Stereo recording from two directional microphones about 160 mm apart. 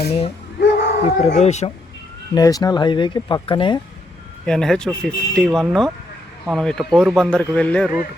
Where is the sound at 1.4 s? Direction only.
45° left (ahead or behind).